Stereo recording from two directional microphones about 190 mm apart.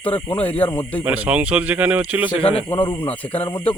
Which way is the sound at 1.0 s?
5° right (ahead or behind).